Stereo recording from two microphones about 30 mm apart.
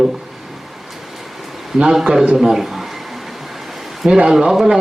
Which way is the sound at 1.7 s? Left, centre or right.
Centre.